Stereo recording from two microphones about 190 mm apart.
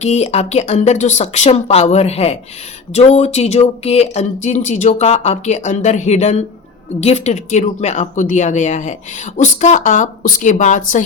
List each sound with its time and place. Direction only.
0.0 s speech: 35° left (ahead or behind)